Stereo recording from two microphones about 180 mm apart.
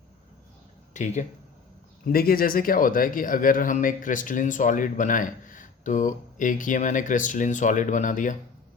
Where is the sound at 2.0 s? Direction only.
55° left (ahead or behind).